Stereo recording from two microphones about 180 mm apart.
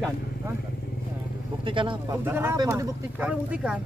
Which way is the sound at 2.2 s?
15° right (ahead or behind).